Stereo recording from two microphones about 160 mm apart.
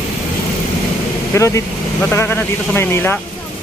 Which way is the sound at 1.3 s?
20° left (ahead or behind).